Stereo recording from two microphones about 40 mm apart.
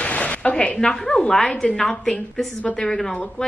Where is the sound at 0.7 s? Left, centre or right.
Centre.